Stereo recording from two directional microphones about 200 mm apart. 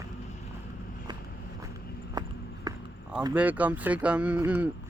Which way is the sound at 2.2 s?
20° right (ahead or behind).